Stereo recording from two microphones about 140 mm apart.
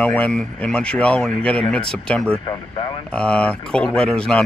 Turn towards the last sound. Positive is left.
turn(degrees=5)  # may be behind; listen again after turning